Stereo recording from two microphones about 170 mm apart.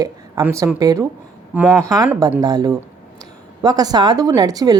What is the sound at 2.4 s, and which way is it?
A woman's voice, 20° right (ahead or behind).